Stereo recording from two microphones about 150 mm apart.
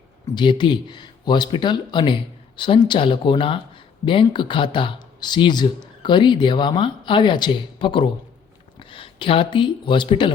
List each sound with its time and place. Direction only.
0.3 s speech: 30° left (ahead or behind)